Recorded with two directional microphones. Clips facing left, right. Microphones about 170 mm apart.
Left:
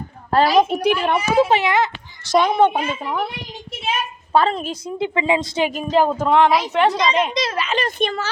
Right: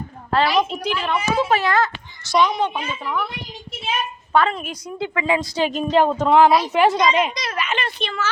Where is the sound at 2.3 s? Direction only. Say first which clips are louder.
Left 4 dB; 55° left (ahead or behind).